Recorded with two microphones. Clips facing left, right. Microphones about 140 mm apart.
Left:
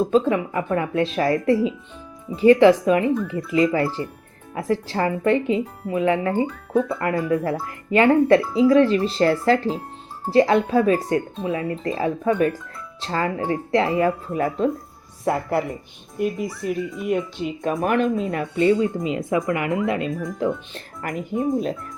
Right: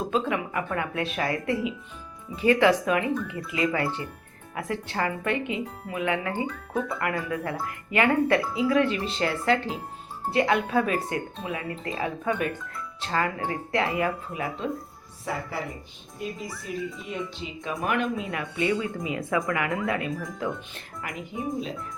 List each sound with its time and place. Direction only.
0.1 s speech: 35° left (ahead or behind)
15.2 s speech: 60° left (ahead or behind); by 20.1 s 20° left (ahead or behind)
20.4 s speech: 40° left (ahead or behind)